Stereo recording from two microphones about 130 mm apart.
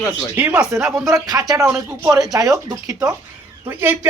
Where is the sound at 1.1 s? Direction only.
30° right (ahead or behind).